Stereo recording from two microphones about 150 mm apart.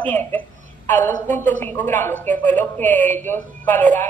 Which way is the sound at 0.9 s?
55° right (ahead or behind).